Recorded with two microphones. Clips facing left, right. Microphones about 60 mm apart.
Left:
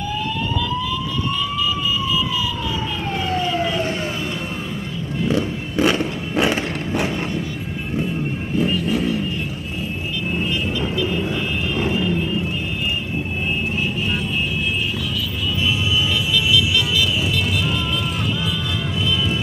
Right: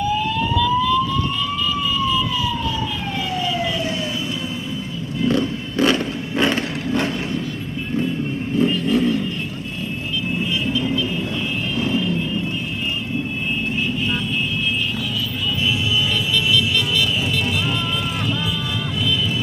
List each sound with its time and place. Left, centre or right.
1.6 s emergency vehicle: centre
3.3 s emergency vehicle: left
5.3 s a sound: centre
8.5 s vehicle: centre
11.8 s vehicle: left